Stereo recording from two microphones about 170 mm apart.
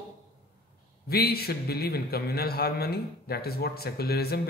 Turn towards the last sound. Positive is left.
turn(degrees=70)  # may be behind; listen again after turning